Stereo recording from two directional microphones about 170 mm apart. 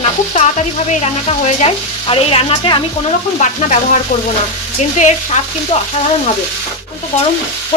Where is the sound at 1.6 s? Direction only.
35° left (ahead or behind).